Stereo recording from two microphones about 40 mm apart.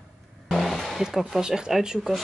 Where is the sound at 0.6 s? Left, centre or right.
Centre.